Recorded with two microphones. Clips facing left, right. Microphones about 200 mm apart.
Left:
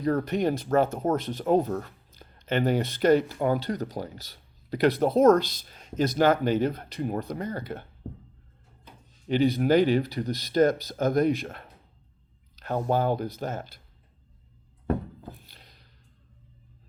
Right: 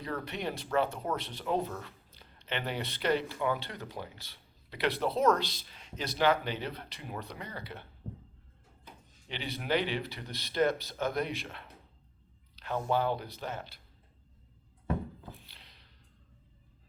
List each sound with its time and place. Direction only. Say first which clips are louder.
0.0 s speech: left 11 dB; 45° left (ahead or behind)
9.3 s speech: left 12 dB; 45° left (ahead or behind)
14.8 s thunk: left 6 dB; 45° left (ahead or behind)